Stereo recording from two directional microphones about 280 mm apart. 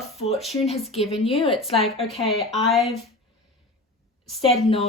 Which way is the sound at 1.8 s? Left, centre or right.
Centre.